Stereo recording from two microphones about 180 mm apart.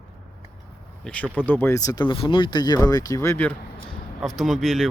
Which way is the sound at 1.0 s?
10° left (ahead or behind).